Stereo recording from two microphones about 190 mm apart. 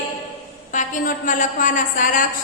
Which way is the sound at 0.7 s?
40° left (ahead or behind).